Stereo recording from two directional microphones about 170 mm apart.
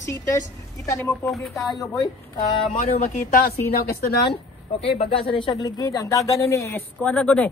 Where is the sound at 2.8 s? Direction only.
40° left (ahead or behind).